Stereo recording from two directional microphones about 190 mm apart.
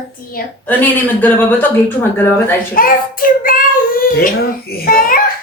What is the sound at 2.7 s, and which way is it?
A child's voice, 50° left (ahead or behind).